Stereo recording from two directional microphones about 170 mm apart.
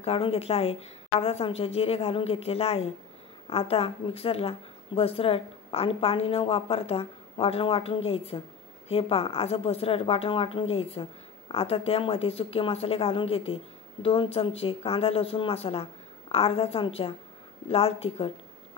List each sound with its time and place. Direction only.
0.0 s a woman's voice: 35° left (ahead or behind)